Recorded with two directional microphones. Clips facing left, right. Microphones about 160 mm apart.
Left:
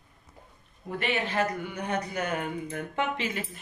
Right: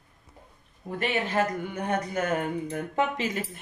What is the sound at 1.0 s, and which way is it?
Speech, 45° right (ahead or behind).